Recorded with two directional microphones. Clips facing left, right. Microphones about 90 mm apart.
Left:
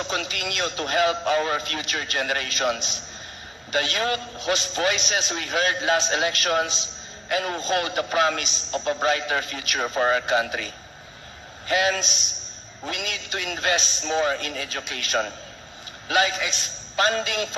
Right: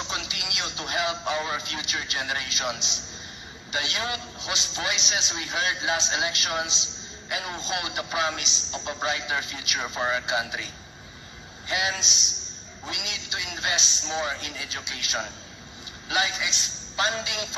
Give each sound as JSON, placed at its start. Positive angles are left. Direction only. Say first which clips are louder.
{"t": 0.0, "sound": "a man's voice", "louder": "left 5 dB", "side_deg": 50}